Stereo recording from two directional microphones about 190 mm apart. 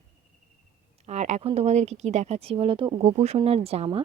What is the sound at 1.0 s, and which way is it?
Speech, 35° right (ahead or behind).